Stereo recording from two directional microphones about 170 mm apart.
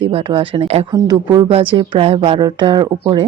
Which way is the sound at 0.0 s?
30° right (ahead or behind).